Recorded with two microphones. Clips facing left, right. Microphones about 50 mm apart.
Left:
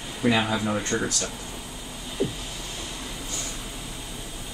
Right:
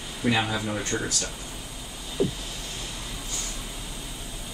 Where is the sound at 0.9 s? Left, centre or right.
Left.